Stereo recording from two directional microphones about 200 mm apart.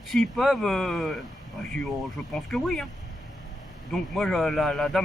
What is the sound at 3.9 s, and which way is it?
Speech, 5° left (ahead or behind).